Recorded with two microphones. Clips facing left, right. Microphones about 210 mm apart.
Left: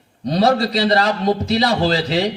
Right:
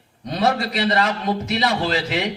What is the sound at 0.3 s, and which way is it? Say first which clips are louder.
A man's voice: left 5 dB; 35° left (ahead or behind).